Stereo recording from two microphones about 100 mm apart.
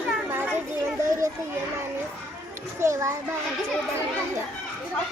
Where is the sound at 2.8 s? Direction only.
30° right (ahead or behind).